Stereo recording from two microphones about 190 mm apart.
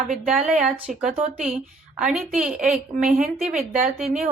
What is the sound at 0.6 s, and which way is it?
A woman's voice, 5° right (ahead or behind).